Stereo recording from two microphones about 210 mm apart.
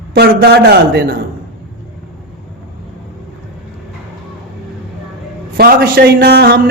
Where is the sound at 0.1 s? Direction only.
50° right (ahead or behind).